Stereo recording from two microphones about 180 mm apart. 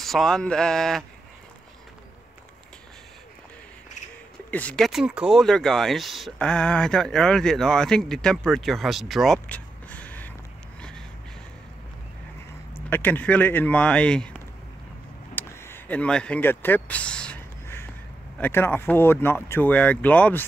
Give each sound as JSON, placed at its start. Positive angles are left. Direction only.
{"t": 0.0, "sound": "speech", "side_deg": 0}
{"t": 4.5, "sound": "speech", "side_deg": 10}
{"t": 10.8, "sound": "vehicle", "side_deg": 5}
{"t": 12.9, "sound": "speech", "side_deg": 10}
{"t": 15.3, "sound": "a sound", "side_deg": 10}
{"t": 18.4, "sound": "speech", "side_deg": 10}